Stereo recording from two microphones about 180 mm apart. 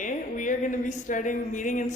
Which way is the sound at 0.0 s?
45° left (ahead or behind).